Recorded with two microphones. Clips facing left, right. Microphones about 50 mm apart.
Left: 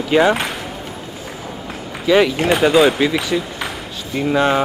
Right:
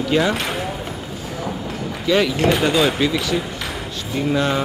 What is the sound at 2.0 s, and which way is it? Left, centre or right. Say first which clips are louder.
Speech: left 3 dB; centre.